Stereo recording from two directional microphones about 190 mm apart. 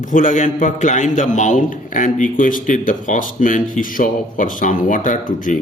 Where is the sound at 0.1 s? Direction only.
40° left (ahead or behind).